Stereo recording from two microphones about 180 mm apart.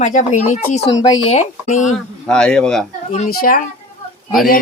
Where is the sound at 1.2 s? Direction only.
40° left (ahead or behind).